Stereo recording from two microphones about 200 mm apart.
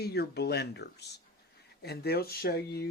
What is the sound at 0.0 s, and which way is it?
Speech, 55° left (ahead or behind).